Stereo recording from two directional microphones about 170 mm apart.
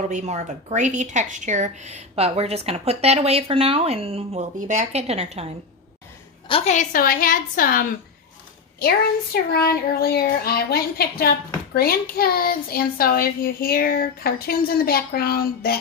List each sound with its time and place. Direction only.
0.1 s speech: 40° right (ahead or behind)
6.5 s a woman's voice: 45° left (ahead or behind)
8.8 s a child's voice: 65° left (ahead or behind)